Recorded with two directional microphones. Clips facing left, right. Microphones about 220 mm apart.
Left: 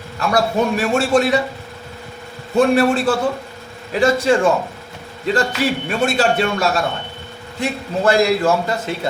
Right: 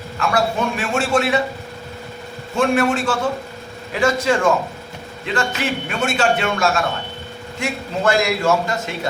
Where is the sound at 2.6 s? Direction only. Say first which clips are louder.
Left 3 dB; 35° left (ahead or behind).